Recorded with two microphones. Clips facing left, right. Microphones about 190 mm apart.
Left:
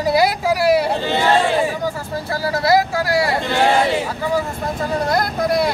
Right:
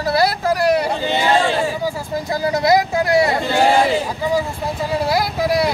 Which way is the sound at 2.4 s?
20° right (ahead or behind).